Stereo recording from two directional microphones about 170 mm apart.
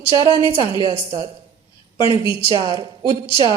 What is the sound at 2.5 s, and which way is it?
Speech, 35° right (ahead or behind).